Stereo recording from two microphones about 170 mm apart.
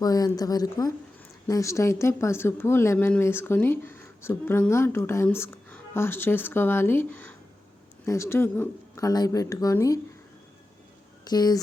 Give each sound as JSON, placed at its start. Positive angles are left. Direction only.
{"t": 0.0, "sound": "a woman's voice", "side_deg": 20}
{"t": 11.3, "sound": "speech", "side_deg": 25}